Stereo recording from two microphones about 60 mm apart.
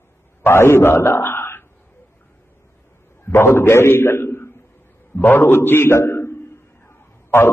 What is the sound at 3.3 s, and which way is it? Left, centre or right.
A man's voice, left.